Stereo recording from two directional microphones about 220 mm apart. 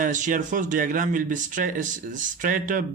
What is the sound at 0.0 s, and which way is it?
Speech, 35° right (ahead or behind).